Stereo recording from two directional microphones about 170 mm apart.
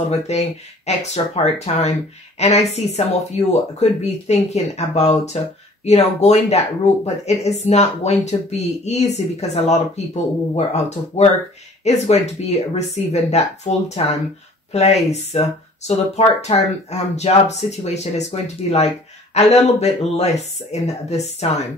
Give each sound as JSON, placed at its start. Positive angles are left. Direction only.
{"t": 0.3, "sound": "speech", "side_deg": 40}